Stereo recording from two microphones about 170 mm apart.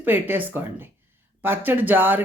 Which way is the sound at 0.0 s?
10° right (ahead or behind).